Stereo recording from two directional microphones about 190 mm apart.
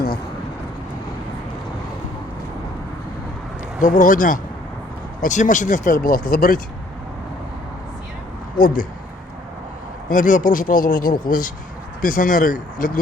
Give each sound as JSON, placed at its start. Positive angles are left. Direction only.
{"t": 3.8, "sound": "speech", "side_deg": 45}
{"t": 8.6, "sound": "speech", "side_deg": 45}
{"t": 10.1, "sound": "speech", "side_deg": 45}